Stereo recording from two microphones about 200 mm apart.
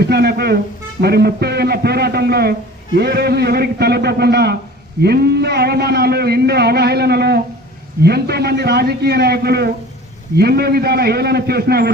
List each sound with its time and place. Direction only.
0.0 s a man's voice: 55° right (ahead or behind)